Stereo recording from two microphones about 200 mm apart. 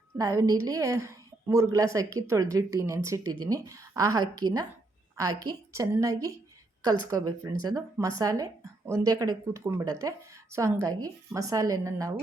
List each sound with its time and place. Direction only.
0.2 s a woman's voice: 15° right (ahead or behind)